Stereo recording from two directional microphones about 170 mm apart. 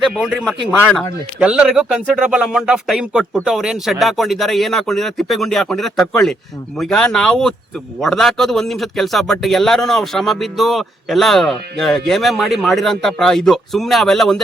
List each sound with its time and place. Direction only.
0.1 s speech: 5° right (ahead or behind)
0.8 s speech: 10° left (ahead or behind)
1.4 s speech: 5° right (ahead or behind)